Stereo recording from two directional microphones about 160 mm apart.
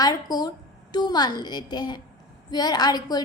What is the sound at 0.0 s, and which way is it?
A woman's voice, 25° left (ahead or behind).